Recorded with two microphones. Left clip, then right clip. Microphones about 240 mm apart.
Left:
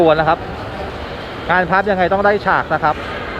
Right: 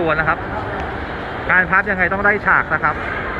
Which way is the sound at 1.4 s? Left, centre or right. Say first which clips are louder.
Even; left.